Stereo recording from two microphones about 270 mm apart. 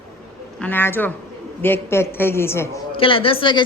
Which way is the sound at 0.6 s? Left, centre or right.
Centre.